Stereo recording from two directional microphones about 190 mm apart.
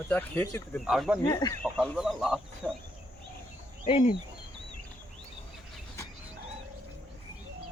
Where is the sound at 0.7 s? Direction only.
Centre (ahead or behind).